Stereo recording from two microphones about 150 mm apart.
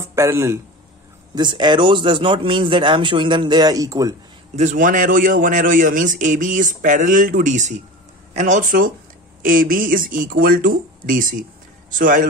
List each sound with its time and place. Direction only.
0.1 s speech: 20° right (ahead or behind)
1.3 s speech: 30° right (ahead or behind)
4.6 s a man's voice: 60° right (ahead or behind)